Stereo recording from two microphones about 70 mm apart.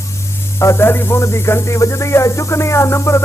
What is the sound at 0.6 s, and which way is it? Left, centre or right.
Speech, left.